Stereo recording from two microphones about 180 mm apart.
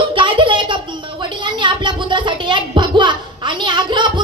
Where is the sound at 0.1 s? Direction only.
25° right (ahead or behind).